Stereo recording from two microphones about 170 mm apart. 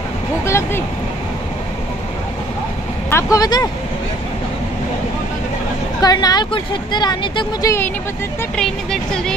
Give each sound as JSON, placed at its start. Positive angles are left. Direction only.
{"t": 0.5, "sound": "vehicle", "side_deg": 15}
{"t": 3.1, "sound": "speech", "side_deg": 15}
{"t": 5.9, "sound": "speech", "side_deg": 25}
{"t": 8.5, "sound": "speech", "side_deg": 5}